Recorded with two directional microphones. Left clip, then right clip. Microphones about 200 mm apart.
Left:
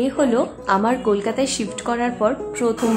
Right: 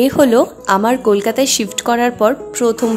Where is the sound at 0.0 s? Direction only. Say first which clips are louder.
Right 8 dB; 35° right (ahead or behind).